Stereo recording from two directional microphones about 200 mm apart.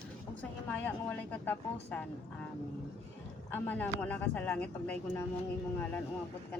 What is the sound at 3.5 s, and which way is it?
Speech, 10° left (ahead or behind).